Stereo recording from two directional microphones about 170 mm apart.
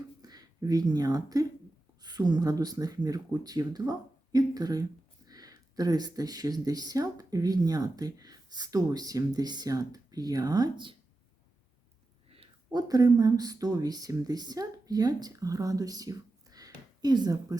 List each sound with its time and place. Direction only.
0.2 s speech: 25° right (ahead or behind)
12.3 s a sound: 35° right (ahead or behind)
12.9 s speech: 20° right (ahead or behind)